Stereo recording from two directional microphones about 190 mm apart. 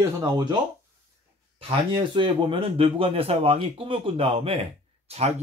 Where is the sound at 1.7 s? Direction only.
25° right (ahead or behind).